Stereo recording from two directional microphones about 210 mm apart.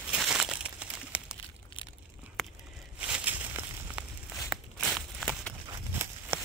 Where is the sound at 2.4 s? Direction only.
Centre (ahead or behind).